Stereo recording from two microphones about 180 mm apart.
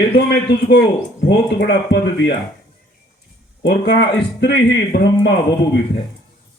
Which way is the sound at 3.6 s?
70° left (ahead or behind).